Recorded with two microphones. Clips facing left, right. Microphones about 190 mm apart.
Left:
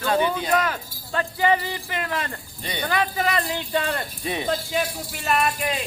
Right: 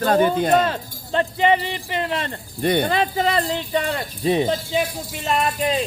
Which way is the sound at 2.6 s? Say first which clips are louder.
Right 11 dB; 55° right (ahead or behind).